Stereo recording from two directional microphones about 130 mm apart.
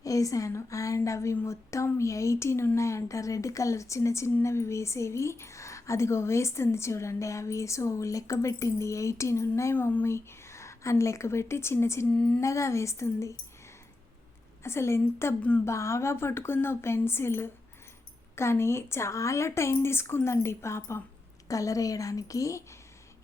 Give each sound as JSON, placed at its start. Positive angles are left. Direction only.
{"t": 0.0, "sound": "a woman's voice", "side_deg": 25}
{"t": 12.1, "sound": "speech", "side_deg": 10}
{"t": 12.4, "sound": "a woman's voice", "side_deg": 25}
{"t": 14.6, "sound": "a woman's voice", "side_deg": 20}
{"t": 15.6, "sound": "a woman's voice", "side_deg": 20}